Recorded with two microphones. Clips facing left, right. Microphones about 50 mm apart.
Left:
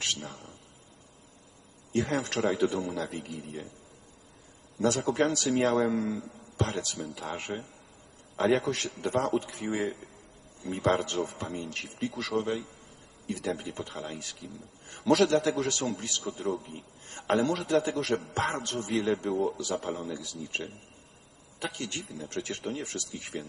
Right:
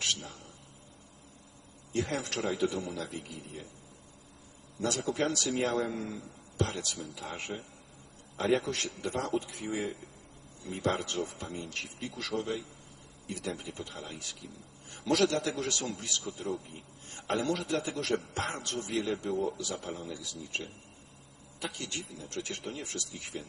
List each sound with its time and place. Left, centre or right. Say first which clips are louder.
0.0 s a sound: left 1 dB; left
1.9 s a man's voice: left 4 dB; left
4.8 s a man's voice: left 5 dB; left